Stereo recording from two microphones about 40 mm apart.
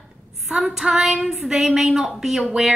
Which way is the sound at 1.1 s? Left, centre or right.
Centre.